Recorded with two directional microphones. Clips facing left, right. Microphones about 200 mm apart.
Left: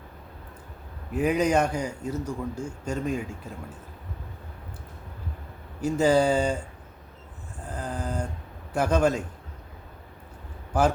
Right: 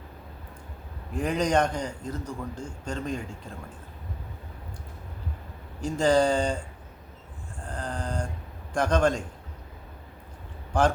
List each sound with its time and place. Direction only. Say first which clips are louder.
1.1 s a man's voice: left 2 dB; 5° left (ahead or behind)
5.8 s a man's voice: left 1 dB; 5° left (ahead or behind)
7.6 s vehicle: left 1 dB; 5° left (ahead or behind)
8.7 s a man's voice: left 1 dB; 5° left (ahead or behind)
10.7 s speech: even; 5° left (ahead or behind)